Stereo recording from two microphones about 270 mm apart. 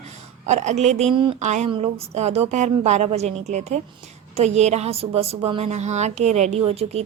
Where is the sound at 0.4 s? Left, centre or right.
Right.